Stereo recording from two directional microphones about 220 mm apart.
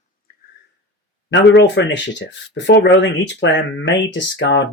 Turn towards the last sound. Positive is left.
turn(degrees=55)  # may be behind; listen again after turning